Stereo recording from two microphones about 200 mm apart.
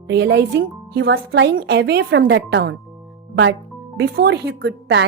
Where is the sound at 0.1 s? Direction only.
60° right (ahead or behind).